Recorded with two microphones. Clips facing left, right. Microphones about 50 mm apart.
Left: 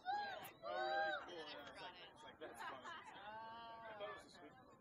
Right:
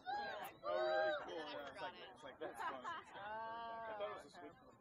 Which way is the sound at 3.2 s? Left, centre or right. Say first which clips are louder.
Right 9 dB; right.